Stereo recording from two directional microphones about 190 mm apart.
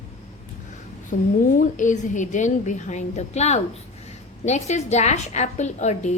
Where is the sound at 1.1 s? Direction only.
45° left (ahead or behind).